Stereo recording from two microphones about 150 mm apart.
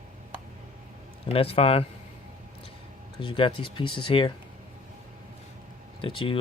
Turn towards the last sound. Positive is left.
turn(degrees=35)  # may be behind; listen again after turning